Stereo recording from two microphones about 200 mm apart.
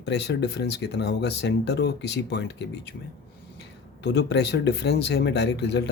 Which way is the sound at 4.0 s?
60° left (ahead or behind).